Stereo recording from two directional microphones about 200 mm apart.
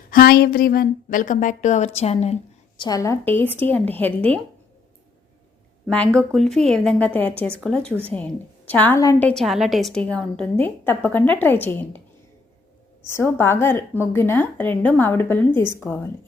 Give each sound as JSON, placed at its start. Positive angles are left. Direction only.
{"t": 0.1, "sound": "a woman's voice", "side_deg": 50}
{"t": 5.8, "sound": "a woman's voice", "side_deg": 5}
{"t": 13.1, "sound": "a woman's voice", "side_deg": 15}